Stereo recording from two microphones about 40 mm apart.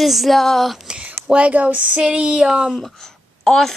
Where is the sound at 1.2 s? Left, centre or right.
Right.